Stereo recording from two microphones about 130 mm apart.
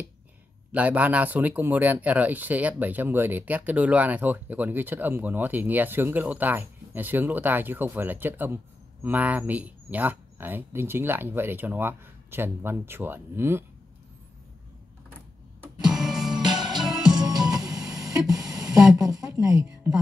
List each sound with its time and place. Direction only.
0.7 s speech: 10° right (ahead or behind)
15.8 s music: 5° right (ahead or behind)
17.2 s music: 30° right (ahead or behind)
18.0 s a sound: 30° right (ahead or behind)
18.9 s speech: 30° right (ahead or behind)